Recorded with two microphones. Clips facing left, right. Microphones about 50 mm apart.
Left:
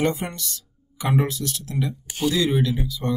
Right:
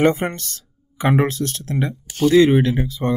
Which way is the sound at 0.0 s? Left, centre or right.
Right.